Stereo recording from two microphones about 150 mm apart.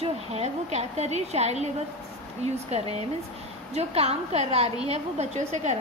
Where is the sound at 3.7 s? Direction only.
45° right (ahead or behind).